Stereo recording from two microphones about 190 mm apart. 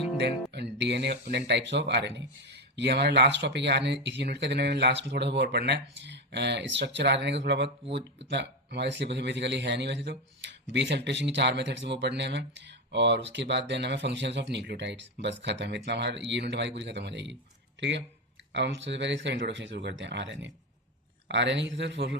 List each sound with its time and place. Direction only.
0.2 s a man's voice: 60° right (ahead or behind)